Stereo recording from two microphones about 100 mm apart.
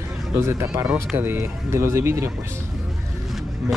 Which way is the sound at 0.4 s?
30° right (ahead or behind).